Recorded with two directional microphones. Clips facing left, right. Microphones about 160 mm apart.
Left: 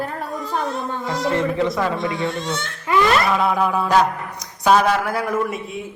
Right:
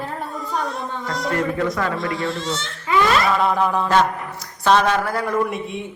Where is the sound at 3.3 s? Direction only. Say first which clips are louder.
Even; 5° left (ahead or behind).